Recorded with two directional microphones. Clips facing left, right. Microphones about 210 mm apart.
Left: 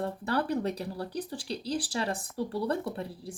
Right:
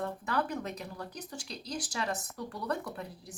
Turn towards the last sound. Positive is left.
turn(degrees=30)  # may be behind; listen again after turning